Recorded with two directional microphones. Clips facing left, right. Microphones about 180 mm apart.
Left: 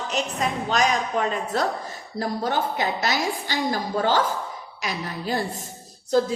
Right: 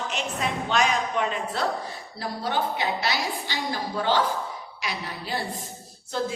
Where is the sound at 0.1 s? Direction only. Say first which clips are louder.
Left 3 dB; 40° left (ahead or behind).